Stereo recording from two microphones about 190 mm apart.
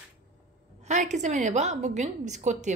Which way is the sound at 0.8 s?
40° right (ahead or behind).